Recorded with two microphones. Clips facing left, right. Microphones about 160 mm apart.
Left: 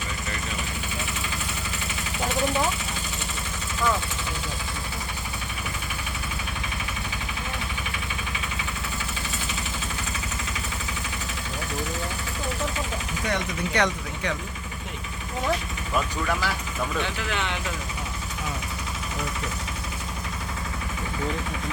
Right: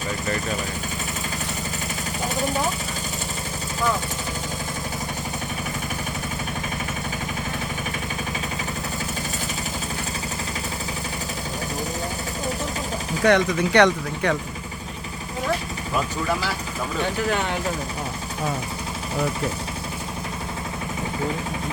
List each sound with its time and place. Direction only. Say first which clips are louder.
2.2 s vehicle: even; 40° right (ahead or behind)
13.2 s speech: right 11 dB; 80° right
17.0 s speech: right 5 dB; 40° right (ahead or behind)